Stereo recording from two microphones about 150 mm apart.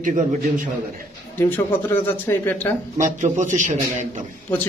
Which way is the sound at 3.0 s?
55° right (ahead or behind).